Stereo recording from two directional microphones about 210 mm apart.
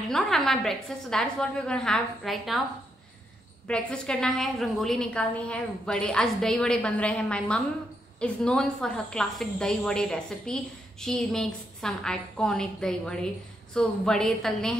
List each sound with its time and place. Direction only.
0.1 s a woman's voice: centre (ahead or behind)
3.6 s a woman's voice: 5° left (ahead or behind)